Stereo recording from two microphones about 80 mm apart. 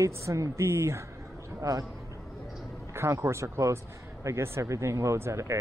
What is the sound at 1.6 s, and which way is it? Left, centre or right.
Speech, right.